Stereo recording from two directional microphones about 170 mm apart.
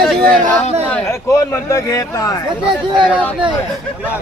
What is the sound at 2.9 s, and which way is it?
Speech, 30° right (ahead or behind).